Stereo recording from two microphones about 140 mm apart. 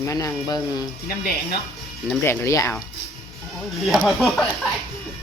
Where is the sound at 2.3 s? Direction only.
20° left (ahead or behind).